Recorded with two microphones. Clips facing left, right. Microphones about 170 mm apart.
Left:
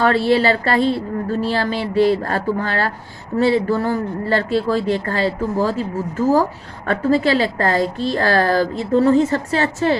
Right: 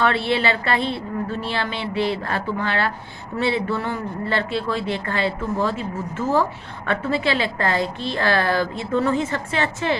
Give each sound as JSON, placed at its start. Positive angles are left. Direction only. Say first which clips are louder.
{"t": 0.0, "sound": "speech", "louder": "left 5 dB", "side_deg": 40}